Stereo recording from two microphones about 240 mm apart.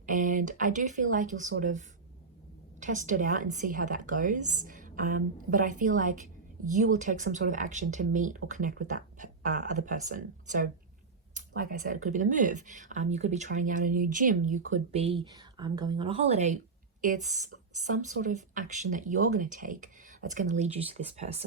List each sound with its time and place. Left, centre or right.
0.0 s speech: right
2.8 s a woman's voice: right
18.2 s a woman's voice: right